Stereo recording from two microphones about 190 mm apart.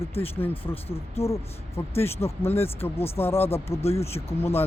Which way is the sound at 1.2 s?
30° left (ahead or behind).